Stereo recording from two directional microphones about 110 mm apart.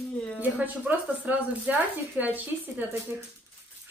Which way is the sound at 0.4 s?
15° right (ahead or behind).